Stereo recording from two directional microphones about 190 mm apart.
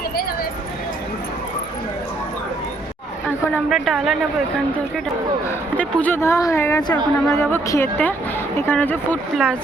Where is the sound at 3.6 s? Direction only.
Centre (ahead or behind).